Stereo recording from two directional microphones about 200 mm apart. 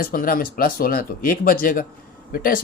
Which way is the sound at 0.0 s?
45° left (ahead or behind).